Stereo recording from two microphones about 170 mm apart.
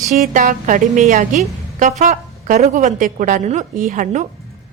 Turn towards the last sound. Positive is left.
turn(degrees=-45)  # may be behind; listen again after turning